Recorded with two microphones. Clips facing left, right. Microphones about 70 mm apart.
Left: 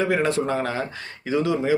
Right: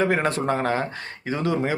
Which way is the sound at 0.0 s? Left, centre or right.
Right.